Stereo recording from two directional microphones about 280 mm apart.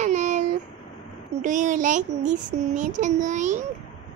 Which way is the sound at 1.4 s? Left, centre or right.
Right.